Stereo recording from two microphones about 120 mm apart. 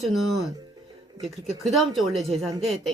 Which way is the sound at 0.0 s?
Centre (ahead or behind).